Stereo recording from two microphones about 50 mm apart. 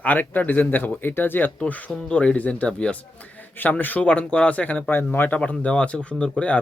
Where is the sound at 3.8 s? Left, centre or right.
Left.